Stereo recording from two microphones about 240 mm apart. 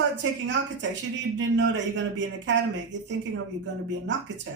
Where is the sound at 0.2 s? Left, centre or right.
Right.